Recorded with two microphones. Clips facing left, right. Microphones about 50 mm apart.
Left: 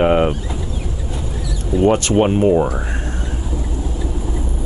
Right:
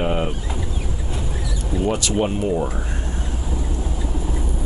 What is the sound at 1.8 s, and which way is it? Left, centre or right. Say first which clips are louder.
Speech: left 7 dB; left.